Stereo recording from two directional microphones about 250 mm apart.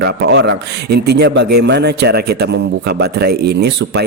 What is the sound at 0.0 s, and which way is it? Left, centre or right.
Speech, right.